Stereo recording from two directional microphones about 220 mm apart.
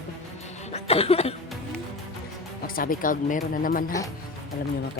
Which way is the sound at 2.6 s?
40° left (ahead or behind).